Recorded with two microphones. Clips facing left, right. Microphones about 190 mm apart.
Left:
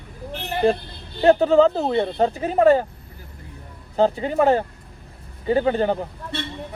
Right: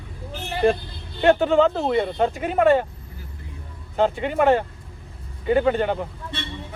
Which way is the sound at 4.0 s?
35° left (ahead or behind).